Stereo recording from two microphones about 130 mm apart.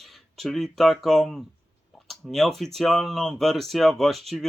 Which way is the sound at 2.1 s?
Centre (ahead or behind).